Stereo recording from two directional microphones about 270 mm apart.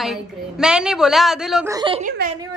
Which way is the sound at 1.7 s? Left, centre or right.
Centre.